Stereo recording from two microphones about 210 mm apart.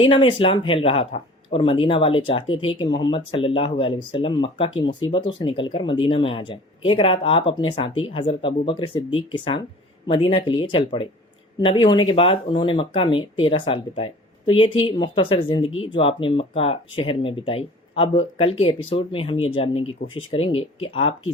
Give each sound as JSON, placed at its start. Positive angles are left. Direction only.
{"t": 0.0, "sound": "speech", "side_deg": 25}